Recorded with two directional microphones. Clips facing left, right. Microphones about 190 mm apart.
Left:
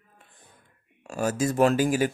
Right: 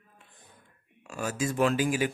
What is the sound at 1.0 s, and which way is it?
Speech, 40° left (ahead or behind).